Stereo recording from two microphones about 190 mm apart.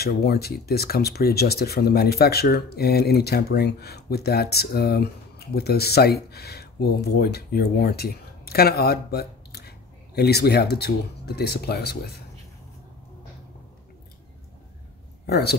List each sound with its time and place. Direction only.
0.0 s speech: 55° left (ahead or behind)
15.2 s a man's voice: 60° left (ahead or behind)